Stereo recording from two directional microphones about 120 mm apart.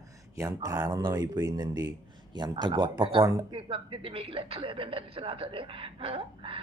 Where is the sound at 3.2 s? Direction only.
30° right (ahead or behind).